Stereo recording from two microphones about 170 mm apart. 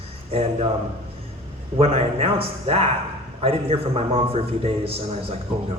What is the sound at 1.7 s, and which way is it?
A man's voice, 35° right (ahead or behind).